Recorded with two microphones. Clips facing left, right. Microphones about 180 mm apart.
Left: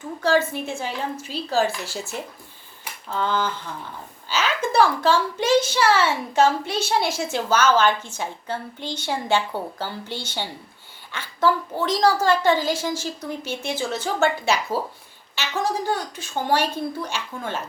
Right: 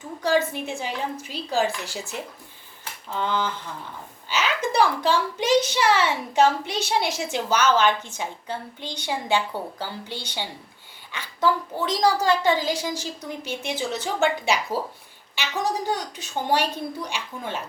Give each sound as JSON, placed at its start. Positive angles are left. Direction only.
{"t": 0.2, "sound": "a woman's voice", "side_deg": -15}
{"t": 3.1, "sound": "a woman's voice", "side_deg": -15}